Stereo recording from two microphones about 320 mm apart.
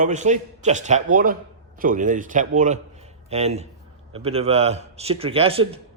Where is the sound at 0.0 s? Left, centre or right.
Right.